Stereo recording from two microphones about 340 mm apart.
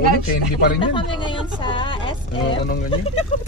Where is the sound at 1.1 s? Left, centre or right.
Centre.